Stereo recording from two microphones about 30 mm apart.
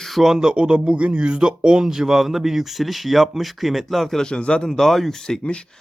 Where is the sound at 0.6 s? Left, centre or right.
Right.